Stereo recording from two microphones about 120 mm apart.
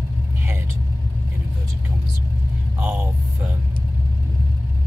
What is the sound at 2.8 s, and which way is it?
Speech, 15° right (ahead or behind).